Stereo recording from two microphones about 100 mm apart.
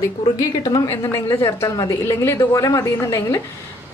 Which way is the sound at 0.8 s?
30° left (ahead or behind).